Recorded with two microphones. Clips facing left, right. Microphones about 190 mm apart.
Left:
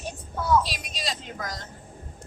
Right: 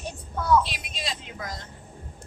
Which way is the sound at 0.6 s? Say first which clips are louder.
Even; 40° left (ahead or behind).